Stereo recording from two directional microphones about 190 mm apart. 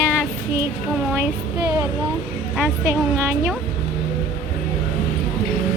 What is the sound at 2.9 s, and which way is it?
Speech, 15° right (ahead or behind).